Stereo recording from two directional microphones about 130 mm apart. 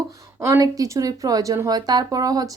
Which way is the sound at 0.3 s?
25° right (ahead or behind).